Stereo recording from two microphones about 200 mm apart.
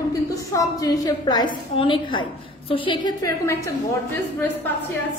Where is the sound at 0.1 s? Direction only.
15° left (ahead or behind).